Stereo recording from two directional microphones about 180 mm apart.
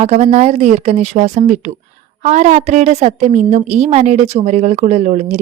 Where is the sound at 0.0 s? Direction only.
40° right (ahead or behind).